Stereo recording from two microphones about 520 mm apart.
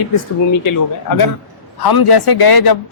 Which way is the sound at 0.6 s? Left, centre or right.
Left.